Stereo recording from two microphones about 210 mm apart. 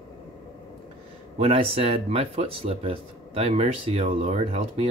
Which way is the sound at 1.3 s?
30° right (ahead or behind).